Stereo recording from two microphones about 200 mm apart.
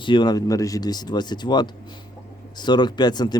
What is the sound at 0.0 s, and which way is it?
Speech, 25° left (ahead or behind).